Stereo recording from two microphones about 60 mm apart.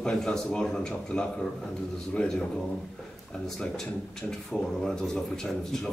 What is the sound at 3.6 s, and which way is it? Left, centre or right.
A man's voice, centre.